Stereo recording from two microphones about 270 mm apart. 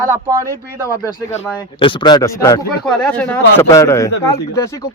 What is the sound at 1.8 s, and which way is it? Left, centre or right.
A man's voice, centre.